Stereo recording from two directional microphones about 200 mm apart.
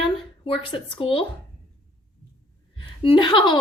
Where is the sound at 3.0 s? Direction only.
25° left (ahead or behind).